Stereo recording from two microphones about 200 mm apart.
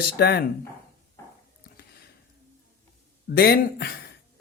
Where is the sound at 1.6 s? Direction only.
50° left (ahead or behind).